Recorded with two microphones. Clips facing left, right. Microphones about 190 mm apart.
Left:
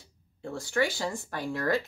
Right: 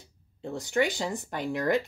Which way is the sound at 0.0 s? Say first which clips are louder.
Right 1 dB; 20° right (ahead or behind).